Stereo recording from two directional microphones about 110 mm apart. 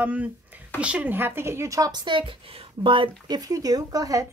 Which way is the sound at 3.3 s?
35° right (ahead or behind).